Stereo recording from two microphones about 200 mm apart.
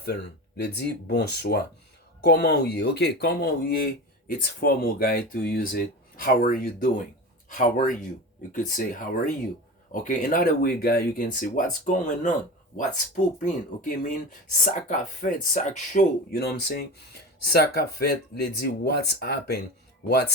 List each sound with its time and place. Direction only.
0.0 s speech: 55° left (ahead or behind); by 16.0 s 40° left (ahead or behind)
16.4 s speech: 55° left (ahead or behind)